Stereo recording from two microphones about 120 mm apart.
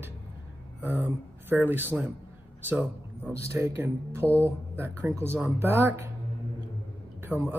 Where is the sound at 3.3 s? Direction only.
20° right (ahead or behind).